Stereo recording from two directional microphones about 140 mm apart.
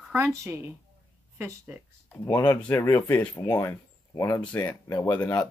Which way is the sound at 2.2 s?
15° left (ahead or behind).